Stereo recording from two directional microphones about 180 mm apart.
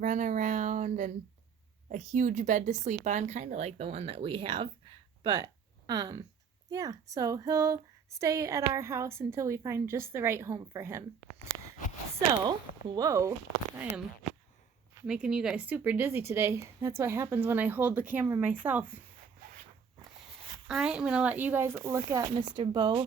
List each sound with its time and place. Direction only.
0.0 s a sound: 45° right (ahead or behind)
1.9 s speech: 40° right (ahead or behind); by 11.0 s 15° right (ahead or behind)
12.3 s speech: 25° right (ahead or behind)
15.0 s speech: 5° right (ahead or behind)
20.7 s speech: 5° right (ahead or behind); by 23.0 s 25° right (ahead or behind)